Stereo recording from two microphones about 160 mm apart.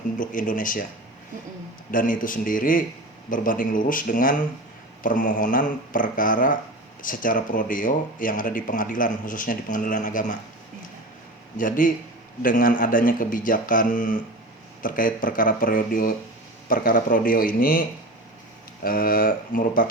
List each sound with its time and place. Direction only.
0.2 s speech: 55° left (ahead or behind)
1.9 s speech: 55° left (ahead or behind)
11.5 s speech: 55° left (ahead or behind)